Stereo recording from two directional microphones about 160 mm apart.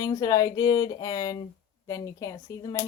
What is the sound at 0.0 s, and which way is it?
Speech, 25° left (ahead or behind).